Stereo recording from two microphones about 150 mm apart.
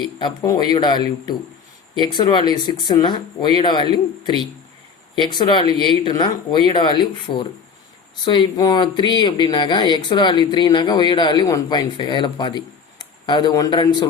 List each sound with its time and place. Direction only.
0.2 s speech: 30° left (ahead or behind)